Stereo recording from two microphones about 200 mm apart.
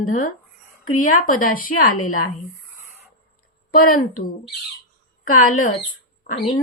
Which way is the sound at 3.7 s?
45° left (ahead or behind).